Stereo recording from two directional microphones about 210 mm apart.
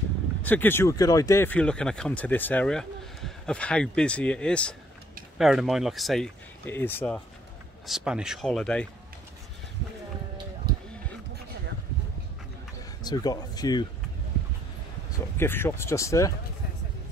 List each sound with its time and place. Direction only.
0.4 s speech: 10° left (ahead or behind)
7.8 s speech: 5° right (ahead or behind)
13.0 s speech: 20° left (ahead or behind)
15.3 s speech: 10° left (ahead or behind)